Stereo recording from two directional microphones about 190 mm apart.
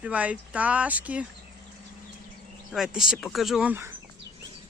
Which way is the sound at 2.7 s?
5° right (ahead or behind).